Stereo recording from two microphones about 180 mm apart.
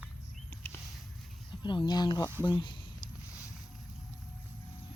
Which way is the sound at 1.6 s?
25° left (ahead or behind).